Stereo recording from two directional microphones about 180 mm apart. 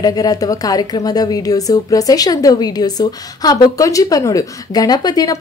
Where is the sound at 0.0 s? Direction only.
20° left (ahead or behind).